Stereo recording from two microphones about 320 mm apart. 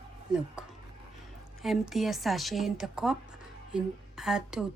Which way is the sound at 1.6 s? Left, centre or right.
Centre.